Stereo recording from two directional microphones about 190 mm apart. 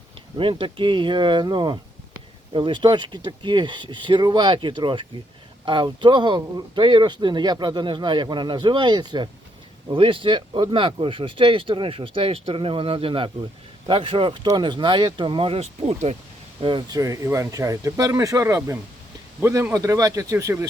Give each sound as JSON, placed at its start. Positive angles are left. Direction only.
{"t": 0.3, "sound": "speech", "side_deg": -25}